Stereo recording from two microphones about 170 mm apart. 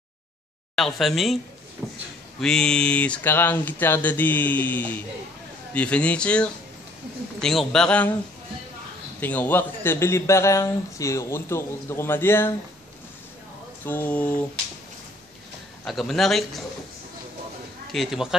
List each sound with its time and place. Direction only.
0.7 s a man's voice: centre (ahead or behind)
1.8 s a sound: centre (ahead or behind)
2.4 s a man's voice: 5° left (ahead or behind)
9.2 s a man's voice: 10° left (ahead or behind)
13.8 s a man's voice: 10° left (ahead or behind)
15.8 s a man's voice: centre (ahead or behind)
17.9 s a man's voice: centre (ahead or behind)